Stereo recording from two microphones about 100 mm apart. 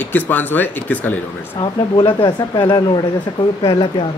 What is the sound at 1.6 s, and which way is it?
Speech, 55° left (ahead or behind).